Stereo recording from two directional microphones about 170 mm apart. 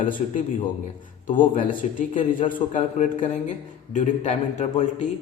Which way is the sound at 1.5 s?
50° left (ahead or behind).